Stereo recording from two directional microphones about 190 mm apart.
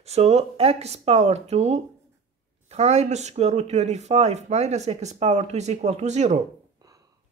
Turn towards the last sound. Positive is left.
turn(degrees=-35)  # may be behind; listen again after turning